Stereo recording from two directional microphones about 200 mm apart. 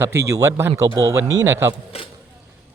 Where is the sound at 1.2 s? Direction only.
70° right (ahead or behind).